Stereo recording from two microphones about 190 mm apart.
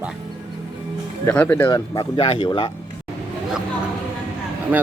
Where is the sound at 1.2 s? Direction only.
10° left (ahead or behind).